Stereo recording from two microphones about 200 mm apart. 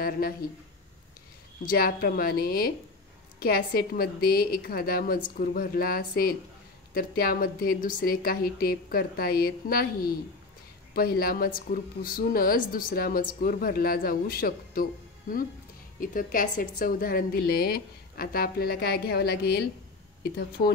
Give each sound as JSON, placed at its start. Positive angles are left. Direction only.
{"t": 0.2, "sound": "speech", "side_deg": 50}
{"t": 1.7, "sound": "speech", "side_deg": 50}